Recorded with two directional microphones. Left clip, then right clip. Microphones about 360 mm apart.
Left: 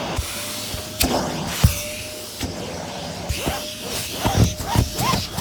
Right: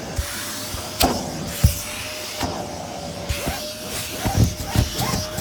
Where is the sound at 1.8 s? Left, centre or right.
Right.